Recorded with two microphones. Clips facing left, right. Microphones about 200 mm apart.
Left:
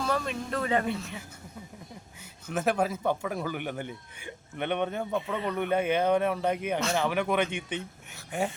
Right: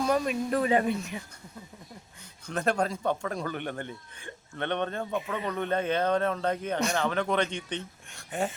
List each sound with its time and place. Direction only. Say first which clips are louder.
0.0 s a man's voice: right 4 dB; 15° right (ahead or behind)
2.5 s a man's voice: left 1 dB; 5° left (ahead or behind)